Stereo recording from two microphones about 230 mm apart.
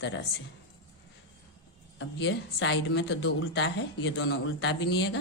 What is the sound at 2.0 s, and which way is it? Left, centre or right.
Speech, left.